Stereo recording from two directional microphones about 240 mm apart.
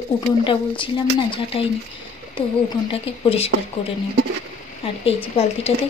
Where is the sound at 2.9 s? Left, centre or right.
Left.